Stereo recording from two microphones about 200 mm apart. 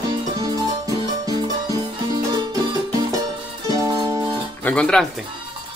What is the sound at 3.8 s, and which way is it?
Music, 15° right (ahead or behind).